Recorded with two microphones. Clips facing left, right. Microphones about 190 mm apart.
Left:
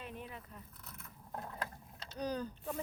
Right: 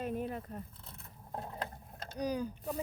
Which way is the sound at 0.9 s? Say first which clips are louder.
Right 2 dB; 30° right (ahead or behind).